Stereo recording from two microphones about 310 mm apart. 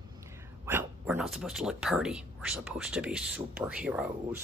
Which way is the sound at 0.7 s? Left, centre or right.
Centre.